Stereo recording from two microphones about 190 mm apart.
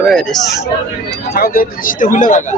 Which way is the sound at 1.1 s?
55° left (ahead or behind).